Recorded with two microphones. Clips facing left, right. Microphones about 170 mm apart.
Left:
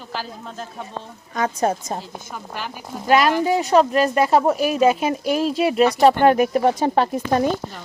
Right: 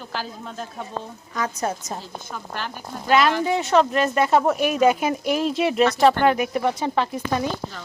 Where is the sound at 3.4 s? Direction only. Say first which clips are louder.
Left 3 dB; 35° left (ahead or behind).